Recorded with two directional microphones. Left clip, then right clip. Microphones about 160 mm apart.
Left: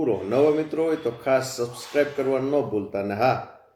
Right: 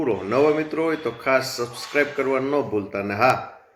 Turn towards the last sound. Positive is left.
turn(degrees=-5)  # may be behind; listen again after turning